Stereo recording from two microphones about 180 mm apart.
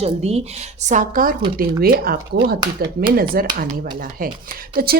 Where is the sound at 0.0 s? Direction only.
35° right (ahead or behind); by 3.5 s 55° right (ahead or behind).